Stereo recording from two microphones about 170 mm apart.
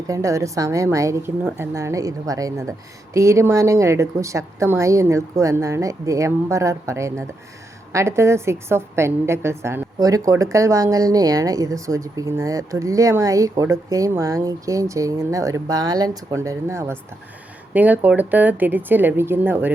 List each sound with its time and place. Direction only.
0.1 s a woman's voice: 20° right (ahead or behind)